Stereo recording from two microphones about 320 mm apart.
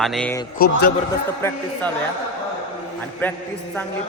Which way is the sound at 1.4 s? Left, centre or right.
Centre.